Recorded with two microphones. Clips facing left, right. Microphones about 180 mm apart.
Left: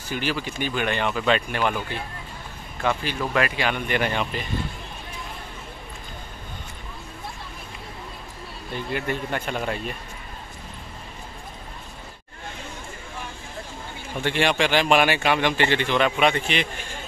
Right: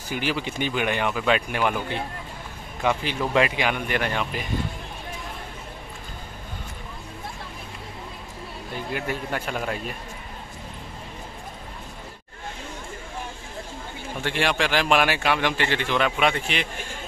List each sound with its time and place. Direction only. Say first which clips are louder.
0.1 s speech: even; 15° right (ahead or behind); by 4.4 s centre (ahead or behind)
8.7 s speech: left 2 dB; 5° right (ahead or behind)
14.2 s speech: left 2 dB; centre (ahead or behind)